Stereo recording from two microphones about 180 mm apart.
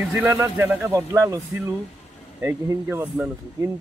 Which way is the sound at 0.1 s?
10° right (ahead or behind).